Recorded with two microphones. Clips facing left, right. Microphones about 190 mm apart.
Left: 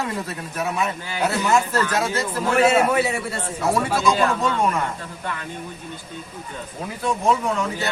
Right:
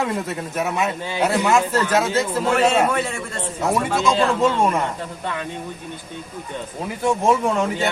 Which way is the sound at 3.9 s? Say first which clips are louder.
Right 1 dB; 25° right (ahead or behind).